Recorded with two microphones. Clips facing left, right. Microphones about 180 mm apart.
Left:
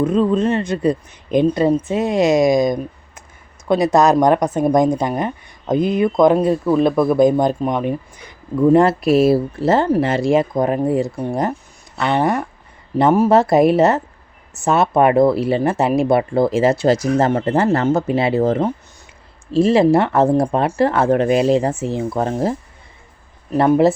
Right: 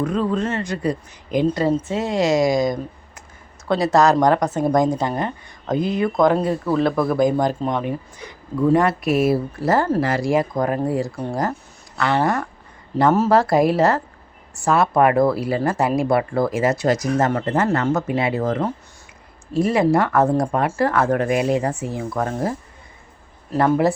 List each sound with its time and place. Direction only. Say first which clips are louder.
0.0 s speech: left 5 dB; 20° left (ahead or behind)
8.6 s speech: left 5 dB; 30° left (ahead or behind)